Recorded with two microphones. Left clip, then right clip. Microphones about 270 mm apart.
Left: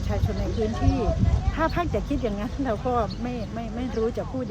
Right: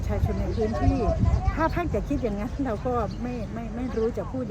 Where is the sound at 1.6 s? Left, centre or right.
Centre.